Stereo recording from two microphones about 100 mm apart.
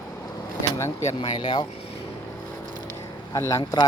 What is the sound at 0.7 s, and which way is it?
Speech, 30° left (ahead or behind).